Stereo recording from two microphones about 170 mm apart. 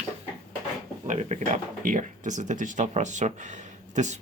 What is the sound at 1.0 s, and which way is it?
Speech, 40° right (ahead or behind).